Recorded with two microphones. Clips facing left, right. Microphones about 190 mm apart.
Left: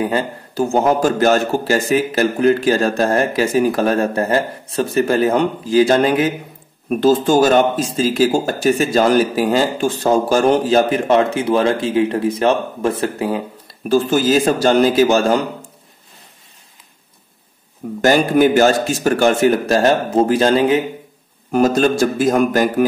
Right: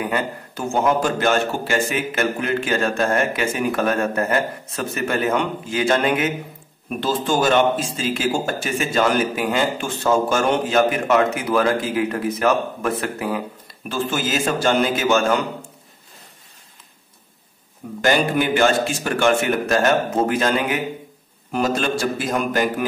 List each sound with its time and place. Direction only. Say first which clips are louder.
0.0 s a man's voice: left 4 dB; 35° left (ahead or behind)
18.0 s a man's voice: left 6 dB; 40° left (ahead or behind)
21.5 s a man's voice: left 7 dB; 45° left (ahead or behind)